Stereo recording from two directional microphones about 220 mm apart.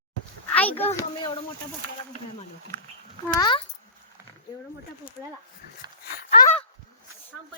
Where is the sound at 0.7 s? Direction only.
25° left (ahead or behind).